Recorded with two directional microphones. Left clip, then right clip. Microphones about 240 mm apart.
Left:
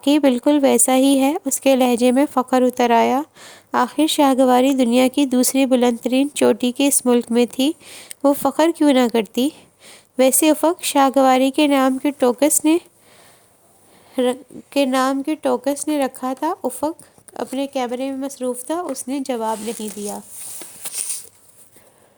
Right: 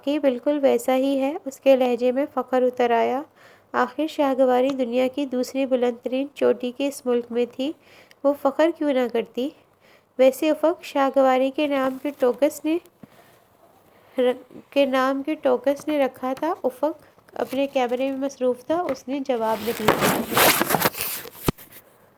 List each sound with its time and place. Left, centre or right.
0.0 s speech: left
14.2 s a woman's voice: left
19.5 s speech: right